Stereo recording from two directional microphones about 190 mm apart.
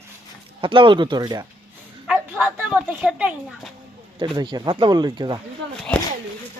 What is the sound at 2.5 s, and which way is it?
Speech, 10° right (ahead or behind).